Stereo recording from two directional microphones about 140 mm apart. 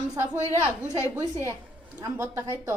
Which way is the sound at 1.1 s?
20° right (ahead or behind).